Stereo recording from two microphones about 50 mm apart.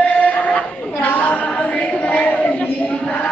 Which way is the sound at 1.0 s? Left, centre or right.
Left.